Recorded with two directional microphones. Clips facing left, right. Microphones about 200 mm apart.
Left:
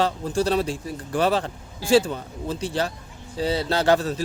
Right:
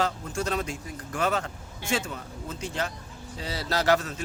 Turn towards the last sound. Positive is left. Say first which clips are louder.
# left 4 dB
turn(degrees=35)  # may be behind; listen again after turning